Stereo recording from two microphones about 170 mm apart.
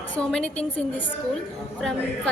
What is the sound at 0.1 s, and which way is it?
Speech, 5° left (ahead or behind).